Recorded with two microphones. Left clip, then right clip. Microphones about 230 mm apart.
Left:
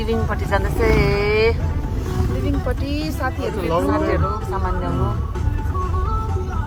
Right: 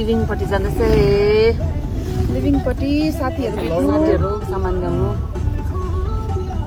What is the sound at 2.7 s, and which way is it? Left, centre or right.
Speech, left.